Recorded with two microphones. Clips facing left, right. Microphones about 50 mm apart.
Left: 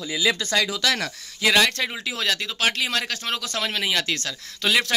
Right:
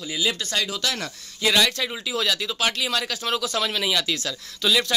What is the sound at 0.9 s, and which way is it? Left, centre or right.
Speech, left.